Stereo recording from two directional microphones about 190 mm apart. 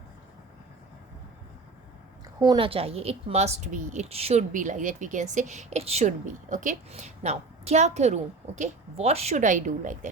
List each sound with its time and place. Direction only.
2.4 s speech: 25° right (ahead or behind); by 10.1 s 40° right (ahead or behind)